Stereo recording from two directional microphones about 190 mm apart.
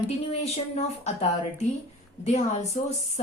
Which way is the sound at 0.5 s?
35° left (ahead or behind).